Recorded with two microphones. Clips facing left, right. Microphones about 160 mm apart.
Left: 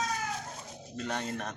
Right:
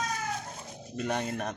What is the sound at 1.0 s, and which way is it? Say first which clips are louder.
Speech: right 4 dB; 10° right (ahead or behind).